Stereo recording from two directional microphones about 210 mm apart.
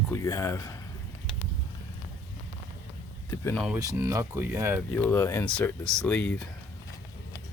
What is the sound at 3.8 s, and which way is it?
Speech, 15° right (ahead or behind).